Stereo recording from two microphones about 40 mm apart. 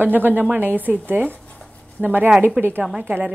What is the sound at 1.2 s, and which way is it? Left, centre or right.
Writing, left.